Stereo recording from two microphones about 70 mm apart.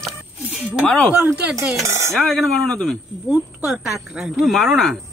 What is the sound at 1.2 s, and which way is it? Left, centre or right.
Speech, right.